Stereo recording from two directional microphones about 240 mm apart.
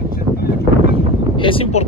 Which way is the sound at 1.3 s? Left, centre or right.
Left.